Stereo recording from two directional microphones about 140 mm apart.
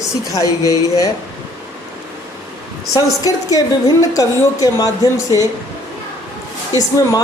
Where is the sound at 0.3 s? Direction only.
25° left (ahead or behind).